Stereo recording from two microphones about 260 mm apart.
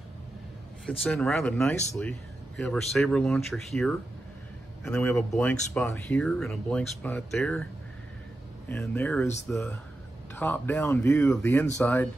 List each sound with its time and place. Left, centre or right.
0.8 s speech: centre
8.6 s speech: centre